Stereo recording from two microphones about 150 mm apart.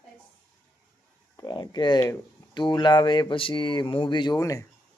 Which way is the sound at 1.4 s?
25° left (ahead or behind).